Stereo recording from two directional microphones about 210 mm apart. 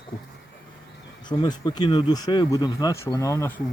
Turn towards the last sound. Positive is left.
turn(degrees=15)  # may be behind; listen again after turning